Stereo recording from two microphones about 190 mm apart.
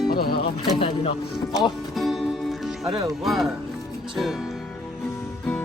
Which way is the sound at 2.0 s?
Centre (ahead or behind).